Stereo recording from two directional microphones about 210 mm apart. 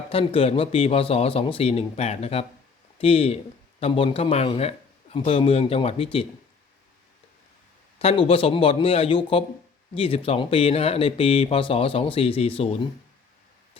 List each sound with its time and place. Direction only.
0.1 s speech: 25° left (ahead or behind)
7.9 s speech: 25° left (ahead or behind)